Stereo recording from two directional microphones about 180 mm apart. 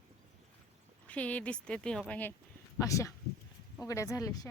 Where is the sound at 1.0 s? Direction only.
10° left (ahead or behind).